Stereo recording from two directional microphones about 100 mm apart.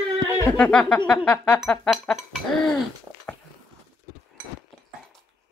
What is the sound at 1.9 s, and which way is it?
Speech, 5° right (ahead or behind).